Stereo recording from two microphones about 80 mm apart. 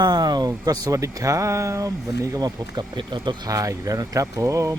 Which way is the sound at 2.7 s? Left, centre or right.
Right.